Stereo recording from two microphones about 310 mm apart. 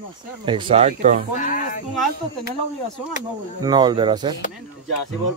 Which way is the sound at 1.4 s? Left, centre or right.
Left.